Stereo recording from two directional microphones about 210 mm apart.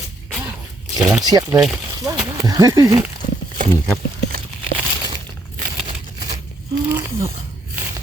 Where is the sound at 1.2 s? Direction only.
20° right (ahead or behind).